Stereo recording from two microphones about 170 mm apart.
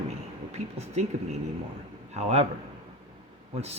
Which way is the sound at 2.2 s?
40° right (ahead or behind).